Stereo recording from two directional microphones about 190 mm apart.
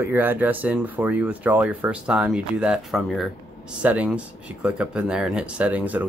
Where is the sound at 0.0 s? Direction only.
10° right (ahead or behind).